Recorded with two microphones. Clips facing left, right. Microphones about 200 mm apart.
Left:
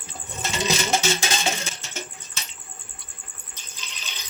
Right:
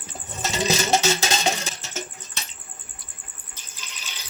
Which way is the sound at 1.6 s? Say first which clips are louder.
Right 2 dB; 40° right (ahead or behind).